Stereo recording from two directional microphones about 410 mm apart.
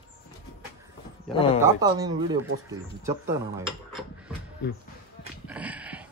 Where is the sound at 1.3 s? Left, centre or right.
Centre.